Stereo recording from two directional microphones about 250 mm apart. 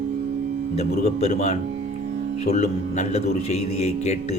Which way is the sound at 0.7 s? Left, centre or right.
Left.